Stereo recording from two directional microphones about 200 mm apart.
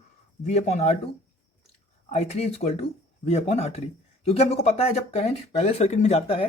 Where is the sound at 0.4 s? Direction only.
35° left (ahead or behind).